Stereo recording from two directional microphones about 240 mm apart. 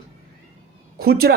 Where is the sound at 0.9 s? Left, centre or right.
Right.